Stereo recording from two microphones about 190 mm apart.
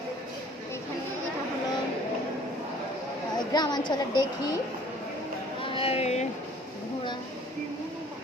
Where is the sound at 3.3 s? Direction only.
20° left (ahead or behind).